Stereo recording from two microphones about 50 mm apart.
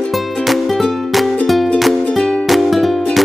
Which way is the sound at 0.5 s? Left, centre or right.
Centre.